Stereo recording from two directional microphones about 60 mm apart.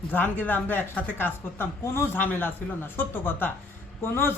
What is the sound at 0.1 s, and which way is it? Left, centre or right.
A woman's voice, left.